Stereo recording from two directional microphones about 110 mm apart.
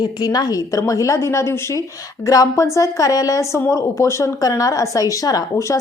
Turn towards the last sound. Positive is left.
turn(degrees=30)  # may be behind; listen again after turning